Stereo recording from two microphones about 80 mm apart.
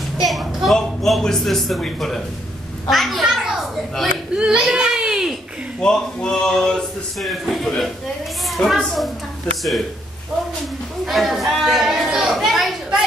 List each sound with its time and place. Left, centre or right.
0.2 s a woman's voice: centre
2.9 s a sound: centre
5.8 s speech: centre
11.1 s speech: centre